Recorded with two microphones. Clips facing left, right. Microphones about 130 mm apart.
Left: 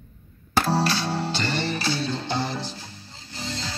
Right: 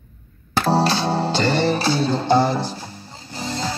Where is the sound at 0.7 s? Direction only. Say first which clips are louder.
Right 9 dB; 25° right (ahead or behind).